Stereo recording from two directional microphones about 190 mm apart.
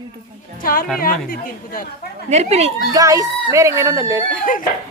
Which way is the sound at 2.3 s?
35° right (ahead or behind).